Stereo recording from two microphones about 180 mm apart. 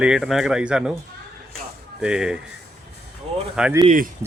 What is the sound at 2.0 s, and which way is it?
Speech, 5° right (ahead or behind).